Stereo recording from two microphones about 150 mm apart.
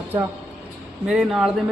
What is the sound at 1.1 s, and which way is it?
Speech, 5° right (ahead or behind).